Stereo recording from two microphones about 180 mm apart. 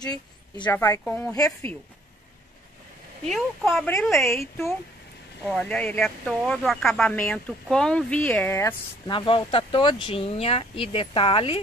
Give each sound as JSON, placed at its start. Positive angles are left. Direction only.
{"t": 0.0, "sound": "speech", "side_deg": 20}
{"t": 3.3, "sound": "speech", "side_deg": 0}
{"t": 5.4, "sound": "speech", "side_deg": 5}
{"t": 9.1, "sound": "speech", "side_deg": 30}